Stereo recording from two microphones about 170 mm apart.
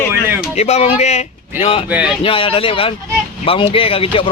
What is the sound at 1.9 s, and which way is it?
Speech, 5° right (ahead or behind).